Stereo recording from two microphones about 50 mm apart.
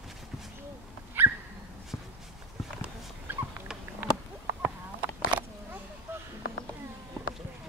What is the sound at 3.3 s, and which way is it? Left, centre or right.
Dog, right.